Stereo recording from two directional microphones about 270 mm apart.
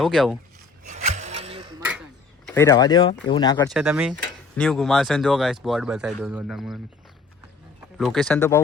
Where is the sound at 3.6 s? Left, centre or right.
Centre.